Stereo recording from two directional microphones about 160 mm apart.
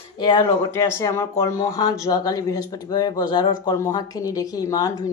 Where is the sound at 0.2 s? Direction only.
30° left (ahead or behind).